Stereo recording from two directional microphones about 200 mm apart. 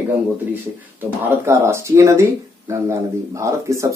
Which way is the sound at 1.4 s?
10° right (ahead or behind).